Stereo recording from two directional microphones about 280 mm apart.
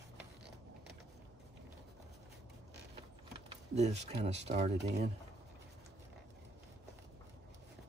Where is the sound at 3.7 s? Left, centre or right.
Right.